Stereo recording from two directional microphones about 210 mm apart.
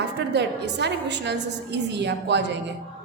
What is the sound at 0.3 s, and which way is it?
A woman's voice, 55° right (ahead or behind).